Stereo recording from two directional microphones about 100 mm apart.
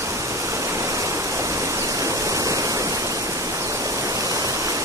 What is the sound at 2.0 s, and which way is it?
Waterfall, 35° right (ahead or behind).